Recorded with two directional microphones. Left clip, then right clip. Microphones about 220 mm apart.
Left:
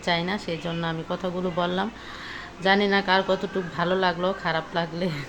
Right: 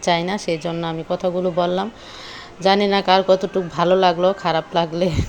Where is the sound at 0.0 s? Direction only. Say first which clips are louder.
Right 6 dB; 25° right (ahead or behind).